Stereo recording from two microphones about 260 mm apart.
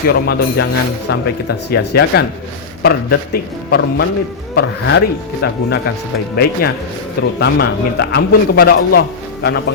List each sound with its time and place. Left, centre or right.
0.1 s a man's voice: left